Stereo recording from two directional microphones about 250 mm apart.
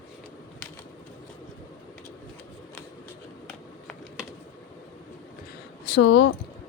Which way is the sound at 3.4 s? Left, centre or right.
Centre.